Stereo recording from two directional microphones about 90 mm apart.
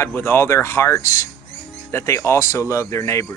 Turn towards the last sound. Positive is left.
turn(degrees=35)  # may be behind; listen again after turning